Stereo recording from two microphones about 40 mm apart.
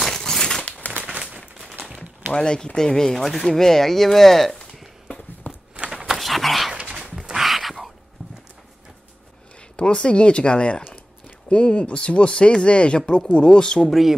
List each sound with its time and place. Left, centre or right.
0.1 s crumpling: centre
0.7 s crumpling: left
2.3 s speech: left; by 5.1 s centre
5.4 s walk: left
6.0 s a sound: centre
7.2 s a sound: centre
8.2 s clip-clop: centre
9.6 s speech: left
13.7 s speech: centre